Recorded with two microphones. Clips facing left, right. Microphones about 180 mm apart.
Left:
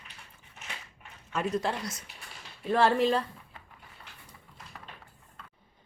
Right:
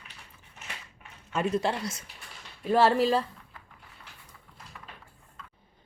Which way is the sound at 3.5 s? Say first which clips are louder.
Even; 25° left (ahead or behind).